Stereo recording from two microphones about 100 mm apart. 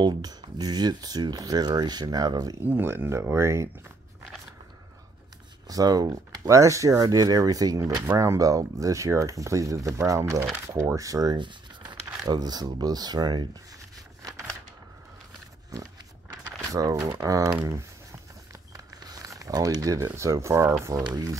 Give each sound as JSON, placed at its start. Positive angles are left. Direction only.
{"t": 0.0, "sound": "speech", "side_deg": -40}
{"t": 2.6, "sound": "speech", "side_deg": -20}
{"t": 5.7, "sound": "speech", "side_deg": -40}
{"t": 16.7, "sound": "speech", "side_deg": -35}
{"t": 18.5, "sound": "a sound", "side_deg": -35}
{"t": 21.0, "sound": "speech", "side_deg": -40}